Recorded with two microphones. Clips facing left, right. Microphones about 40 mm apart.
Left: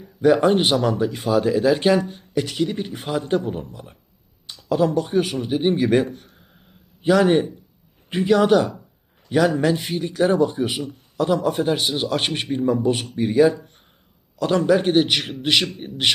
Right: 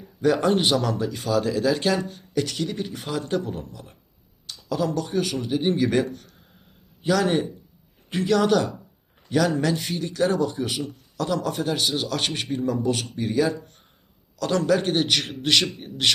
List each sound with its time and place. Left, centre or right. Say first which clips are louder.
0.0 s a man's voice: left 5 dB; centre